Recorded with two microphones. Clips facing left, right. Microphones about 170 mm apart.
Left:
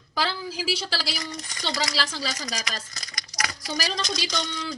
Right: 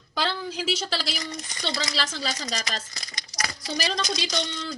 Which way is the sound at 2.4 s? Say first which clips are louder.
Right 1 dB; 25° right (ahead or behind).